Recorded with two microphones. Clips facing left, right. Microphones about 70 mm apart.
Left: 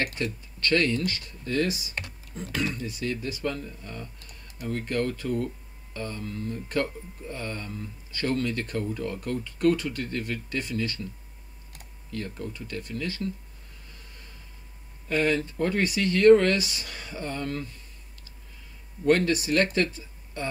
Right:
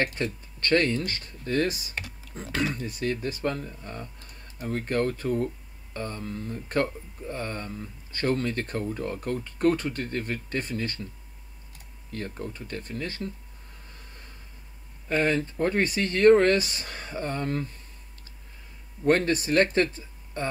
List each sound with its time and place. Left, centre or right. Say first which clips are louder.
0.0 s speech: right 2 dB; right
2.4 s speech: right 1 dB; right
2.7 s speech: right 2 dB; right
12.1 s speech: even; right
15.0 s speech: even; right
19.0 s speech: even; right